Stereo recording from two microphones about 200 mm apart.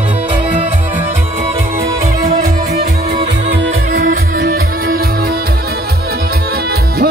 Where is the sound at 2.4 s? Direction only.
50° right (ahead or behind).